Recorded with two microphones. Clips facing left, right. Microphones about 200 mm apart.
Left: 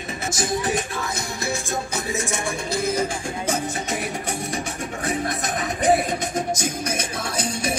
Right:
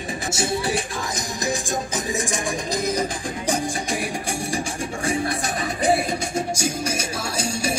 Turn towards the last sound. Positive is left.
turn(degrees=-10)  # may be behind; listen again after turning